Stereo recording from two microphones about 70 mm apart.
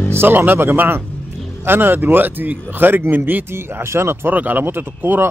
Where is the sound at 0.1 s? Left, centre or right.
Right.